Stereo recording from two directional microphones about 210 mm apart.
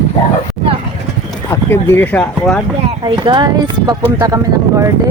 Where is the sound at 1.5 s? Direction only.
10° left (ahead or behind).